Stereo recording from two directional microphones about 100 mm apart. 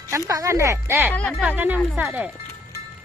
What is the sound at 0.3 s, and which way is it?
Speech, 30° right (ahead or behind).